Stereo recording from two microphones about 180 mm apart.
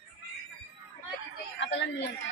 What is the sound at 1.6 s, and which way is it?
Speech, 80° left.